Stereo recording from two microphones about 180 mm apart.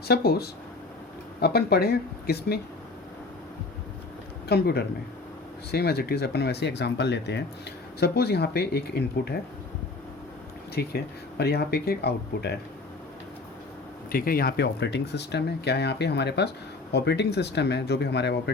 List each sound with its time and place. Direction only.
0.1 s speech: 60° left (ahead or behind)
4.4 s speech: 65° left (ahead or behind)
10.8 s speech: 60° left (ahead or behind)
14.1 s speech: 55° left (ahead or behind); by 18.5 s 70° left (ahead or behind)